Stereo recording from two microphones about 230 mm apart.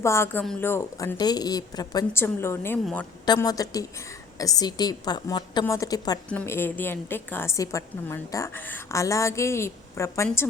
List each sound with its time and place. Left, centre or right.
0.0 s a woman's voice: centre